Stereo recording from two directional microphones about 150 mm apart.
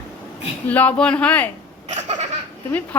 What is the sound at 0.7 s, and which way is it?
Speech, 10° left (ahead or behind).